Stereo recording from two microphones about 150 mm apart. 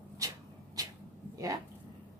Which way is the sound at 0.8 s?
25° right (ahead or behind).